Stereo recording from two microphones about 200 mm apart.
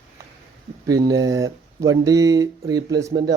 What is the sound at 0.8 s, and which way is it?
A man's voice, 20° right (ahead or behind).